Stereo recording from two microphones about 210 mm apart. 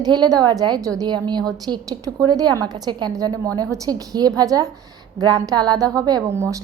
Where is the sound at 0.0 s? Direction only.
20° right (ahead or behind).